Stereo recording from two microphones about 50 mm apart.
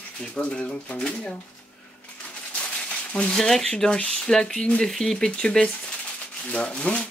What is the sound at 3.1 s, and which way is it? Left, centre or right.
Speech, left.